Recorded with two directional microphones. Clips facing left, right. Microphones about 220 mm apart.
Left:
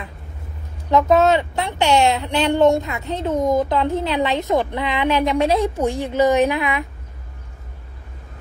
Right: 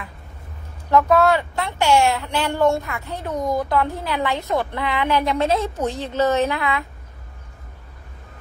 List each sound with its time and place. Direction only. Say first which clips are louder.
0.8 s a woman's voice: left 1 dB; 20° left (ahead or behind)